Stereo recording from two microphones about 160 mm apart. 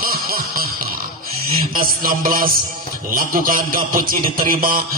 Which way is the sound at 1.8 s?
65° right (ahead or behind).